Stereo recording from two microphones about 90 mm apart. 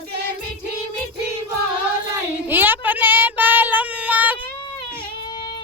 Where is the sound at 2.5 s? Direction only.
20° right (ahead or behind).